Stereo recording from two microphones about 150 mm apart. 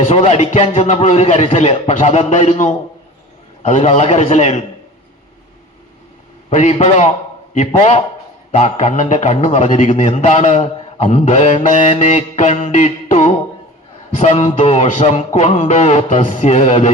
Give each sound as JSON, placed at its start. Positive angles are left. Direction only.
{"t": 0.1, "sound": "a man's voice", "side_deg": 45}
{"t": 6.5, "sound": "a man's voice", "side_deg": 50}